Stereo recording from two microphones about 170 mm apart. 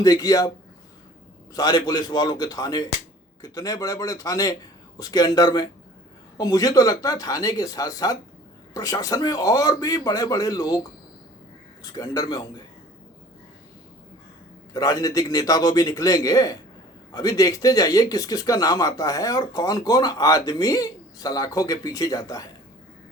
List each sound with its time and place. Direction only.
0.0 s speech: 20° left (ahead or behind)
1.5 s speech: 25° left (ahead or behind)
11.8 s speech: 25° left (ahead or behind)
14.7 s speech: 20° left (ahead or behind)